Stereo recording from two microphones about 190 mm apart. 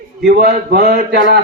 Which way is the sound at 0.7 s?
55° right (ahead or behind).